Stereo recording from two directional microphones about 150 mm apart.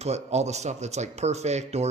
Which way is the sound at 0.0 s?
45° right (ahead or behind).